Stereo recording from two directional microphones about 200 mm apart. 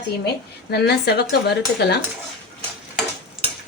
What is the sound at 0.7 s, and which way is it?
Speech, 55° left (ahead or behind).